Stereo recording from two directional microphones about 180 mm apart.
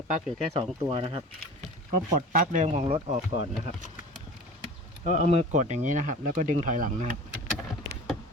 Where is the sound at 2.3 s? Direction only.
45° right (ahead or behind).